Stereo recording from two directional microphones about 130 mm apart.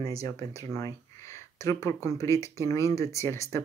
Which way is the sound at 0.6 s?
25° left (ahead or behind).